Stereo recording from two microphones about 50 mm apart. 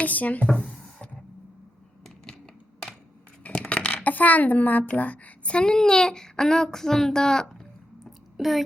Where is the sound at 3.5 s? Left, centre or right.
Centre.